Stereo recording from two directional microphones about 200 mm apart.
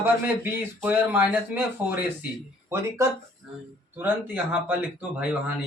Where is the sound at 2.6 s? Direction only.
15° right (ahead or behind).